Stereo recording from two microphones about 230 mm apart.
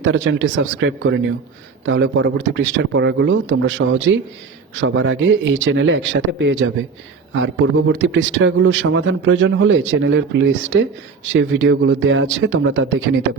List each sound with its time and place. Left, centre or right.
0.0 s a man's voice: right